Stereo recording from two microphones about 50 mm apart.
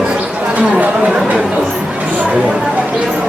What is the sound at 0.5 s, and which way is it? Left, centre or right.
Speech, right.